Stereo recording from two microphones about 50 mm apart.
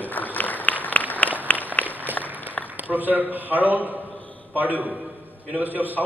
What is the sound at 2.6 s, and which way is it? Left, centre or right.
A man's voice, right.